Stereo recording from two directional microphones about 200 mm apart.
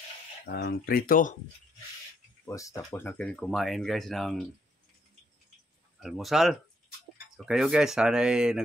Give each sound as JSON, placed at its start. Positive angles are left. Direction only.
{"t": 0.5, "sound": "speech", "side_deg": 55}
{"t": 2.4, "sound": "speech", "side_deg": 15}
{"t": 5.9, "sound": "speech", "side_deg": 0}